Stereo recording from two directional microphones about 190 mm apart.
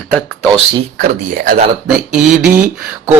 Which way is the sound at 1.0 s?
45° right (ahead or behind).